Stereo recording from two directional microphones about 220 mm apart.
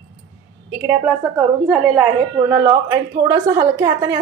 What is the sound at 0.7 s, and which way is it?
A woman's voice, 10° right (ahead or behind).